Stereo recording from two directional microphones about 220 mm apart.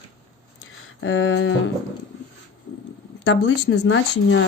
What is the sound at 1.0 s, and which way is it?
Speech, 65° left (ahead or behind).